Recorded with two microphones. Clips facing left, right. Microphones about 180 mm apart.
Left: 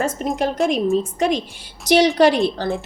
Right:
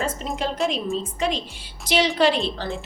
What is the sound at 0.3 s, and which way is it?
Speech, 45° left (ahead or behind).